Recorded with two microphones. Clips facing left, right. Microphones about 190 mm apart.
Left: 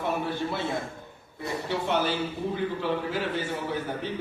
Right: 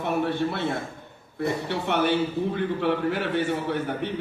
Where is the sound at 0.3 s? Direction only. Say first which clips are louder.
Right 4 dB; 60° right (ahead or behind).